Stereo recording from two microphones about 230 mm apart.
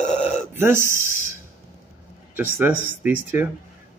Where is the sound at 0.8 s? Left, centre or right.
Centre.